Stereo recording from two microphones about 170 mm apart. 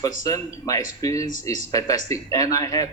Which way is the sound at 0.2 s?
20° left (ahead or behind).